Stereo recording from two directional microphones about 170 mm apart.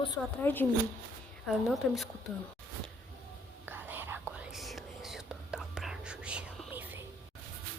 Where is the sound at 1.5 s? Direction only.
Centre (ahead or behind).